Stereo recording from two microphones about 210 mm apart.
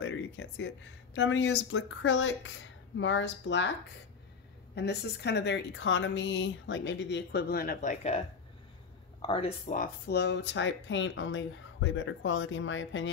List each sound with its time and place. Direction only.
0.0 s speech: 60° left (ahead or behind)
4.7 s speech: 55° left (ahead or behind); by 8.2 s 35° left (ahead or behind)
9.2 s speech: 25° left (ahead or behind)
9.7 s speech: 45° left (ahead or behind); by 13.1 s 65° left (ahead or behind)